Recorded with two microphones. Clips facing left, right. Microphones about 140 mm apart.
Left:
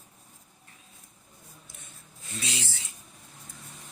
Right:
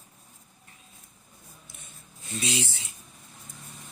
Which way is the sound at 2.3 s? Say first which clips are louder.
Right 6 dB; 20° right (ahead or behind).